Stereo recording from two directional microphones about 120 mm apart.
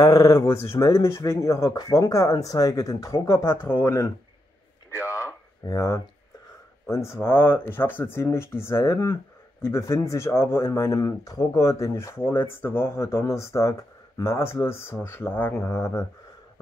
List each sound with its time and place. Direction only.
0.0 s speech: 25° left (ahead or behind)
5.2 s a sound: 25° left (ahead or behind)
6.9 s speech: 25° left (ahead or behind)
15.6 s speech: 25° left (ahead or behind)